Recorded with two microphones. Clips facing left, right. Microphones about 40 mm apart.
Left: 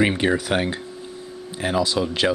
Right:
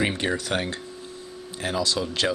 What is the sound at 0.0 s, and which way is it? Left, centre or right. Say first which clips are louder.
Speech: left 6 dB; centre.